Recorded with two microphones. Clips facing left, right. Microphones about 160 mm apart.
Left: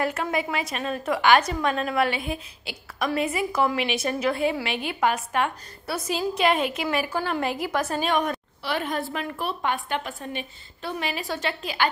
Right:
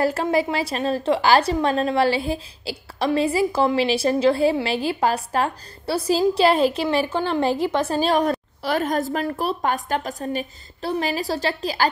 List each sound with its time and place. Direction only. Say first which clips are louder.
0.0 s a woman's voice: right 6 dB; 35° right (ahead or behind)